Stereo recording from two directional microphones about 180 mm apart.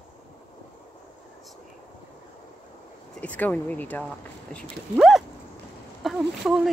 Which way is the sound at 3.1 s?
10° left (ahead or behind).